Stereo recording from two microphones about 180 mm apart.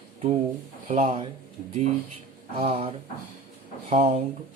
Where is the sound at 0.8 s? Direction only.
40° right (ahead or behind).